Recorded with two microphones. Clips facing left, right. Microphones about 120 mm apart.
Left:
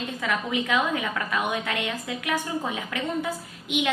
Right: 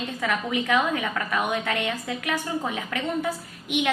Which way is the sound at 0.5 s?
20° left (ahead or behind).